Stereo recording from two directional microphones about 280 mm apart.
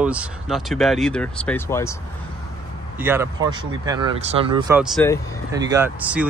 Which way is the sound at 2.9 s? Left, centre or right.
Centre.